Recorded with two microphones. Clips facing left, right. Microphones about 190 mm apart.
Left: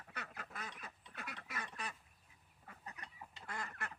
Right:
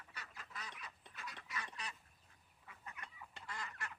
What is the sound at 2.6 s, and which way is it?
Chicken, 40° left (ahead or behind).